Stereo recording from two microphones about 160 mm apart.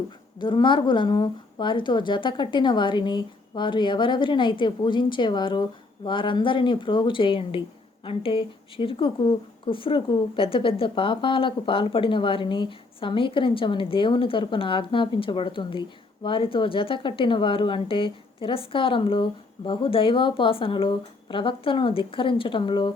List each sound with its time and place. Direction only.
0.3 s a woman's voice: 30° left (ahead or behind)